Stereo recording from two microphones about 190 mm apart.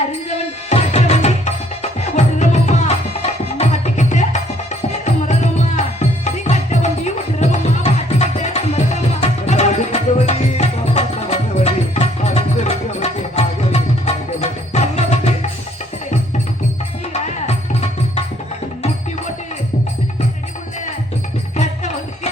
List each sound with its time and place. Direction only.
0.3 s music: 35° left (ahead or behind)
17.2 s music: 35° left (ahead or behind)
21.5 s music: 35° left (ahead or behind)